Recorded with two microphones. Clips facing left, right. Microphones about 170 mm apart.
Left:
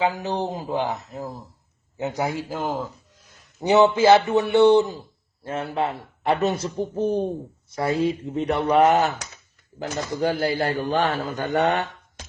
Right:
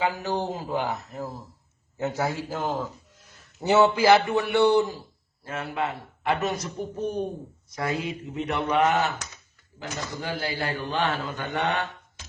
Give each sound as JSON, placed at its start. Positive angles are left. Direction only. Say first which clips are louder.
{"t": 0.0, "sound": "a man's voice", "louder": "left 3 dB", "side_deg": 20}